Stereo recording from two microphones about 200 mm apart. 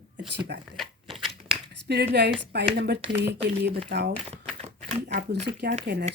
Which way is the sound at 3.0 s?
25° right (ahead or behind).